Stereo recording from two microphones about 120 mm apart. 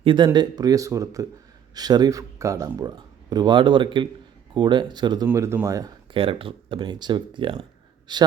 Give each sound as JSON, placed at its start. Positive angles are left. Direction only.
{"t": 0.0, "sound": "speech", "side_deg": -45}
{"t": 0.3, "sound": "speech", "side_deg": -35}
{"t": 5.3, "sound": "speech", "side_deg": -20}
{"t": 6.1, "sound": "speech", "side_deg": -45}